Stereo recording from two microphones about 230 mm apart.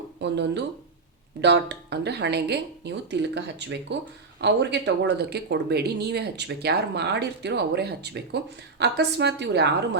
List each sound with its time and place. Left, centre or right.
0.2 s speech: right